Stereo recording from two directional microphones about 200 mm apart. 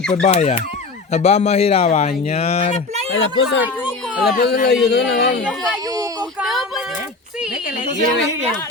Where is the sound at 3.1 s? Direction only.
70° left (ahead or behind).